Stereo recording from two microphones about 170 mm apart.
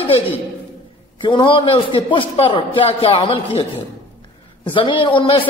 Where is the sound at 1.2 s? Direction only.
30° left (ahead or behind).